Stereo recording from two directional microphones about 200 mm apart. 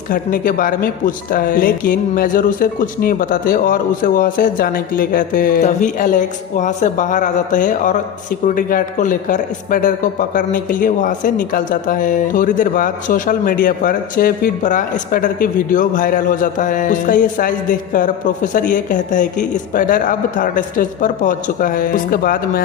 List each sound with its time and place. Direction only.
0.1 s a man's voice: 45° left (ahead or behind)